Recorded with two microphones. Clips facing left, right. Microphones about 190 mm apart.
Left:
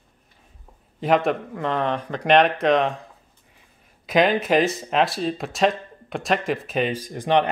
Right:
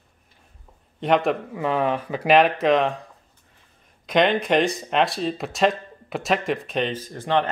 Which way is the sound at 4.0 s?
5° left (ahead or behind).